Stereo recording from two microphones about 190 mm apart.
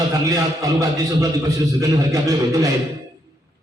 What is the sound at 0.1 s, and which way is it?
A man's voice, 20° right (ahead or behind).